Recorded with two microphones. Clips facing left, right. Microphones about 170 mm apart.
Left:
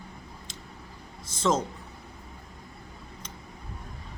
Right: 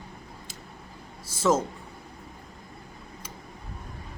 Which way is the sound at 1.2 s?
10° right (ahead or behind).